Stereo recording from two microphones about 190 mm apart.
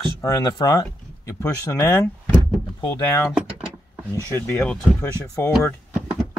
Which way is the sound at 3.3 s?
5° right (ahead or behind).